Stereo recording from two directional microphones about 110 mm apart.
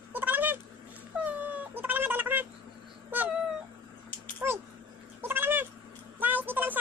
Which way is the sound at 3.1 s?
15° right (ahead or behind).